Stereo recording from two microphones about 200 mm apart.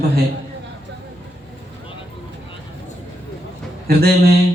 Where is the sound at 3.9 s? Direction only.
50° right (ahead or behind).